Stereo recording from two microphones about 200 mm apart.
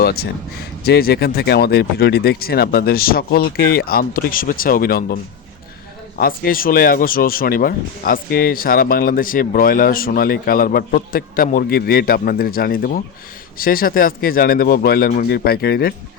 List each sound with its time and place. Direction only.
0.0 s speech: 50° left (ahead or behind)
6.1 s speech: 50° left (ahead or behind)